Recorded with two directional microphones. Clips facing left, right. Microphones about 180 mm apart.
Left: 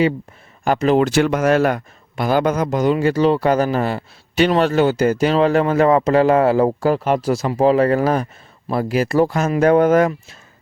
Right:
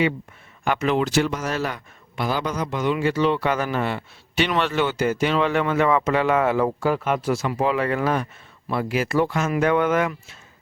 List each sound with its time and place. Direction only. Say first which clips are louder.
0.6 s speech: left 6 dB; 35° left (ahead or behind)
1.0 s speech: left 7 dB; 55° left (ahead or behind); by 10.3 s 40° left (ahead or behind)